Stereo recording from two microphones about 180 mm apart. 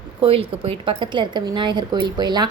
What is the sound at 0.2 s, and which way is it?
A woman's voice, 30° right (ahead or behind).